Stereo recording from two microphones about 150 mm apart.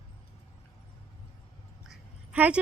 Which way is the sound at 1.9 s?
10° right (ahead or behind).